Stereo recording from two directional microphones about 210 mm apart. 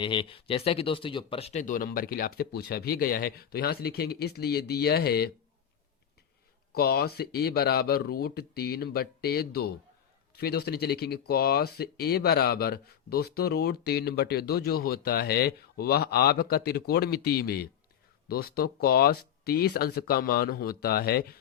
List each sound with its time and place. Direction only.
0.0 s speech: 25° left (ahead or behind); by 5.3 s 50° left (ahead or behind)
6.7 s speech: 50° left (ahead or behind)